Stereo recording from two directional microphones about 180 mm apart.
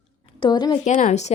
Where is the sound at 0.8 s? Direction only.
40° left (ahead or behind).